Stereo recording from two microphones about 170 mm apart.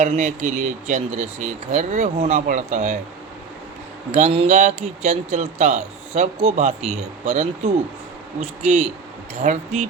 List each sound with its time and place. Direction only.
0.0 s speech: 45° right (ahead or behind)
4.1 s speech: 40° right (ahead or behind)